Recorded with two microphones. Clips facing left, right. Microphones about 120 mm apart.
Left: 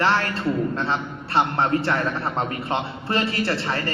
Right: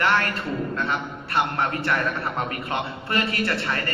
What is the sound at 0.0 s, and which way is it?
A man's voice, 30° left (ahead or behind).